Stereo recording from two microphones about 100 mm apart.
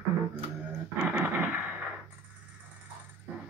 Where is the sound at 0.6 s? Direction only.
20° right (ahead or behind).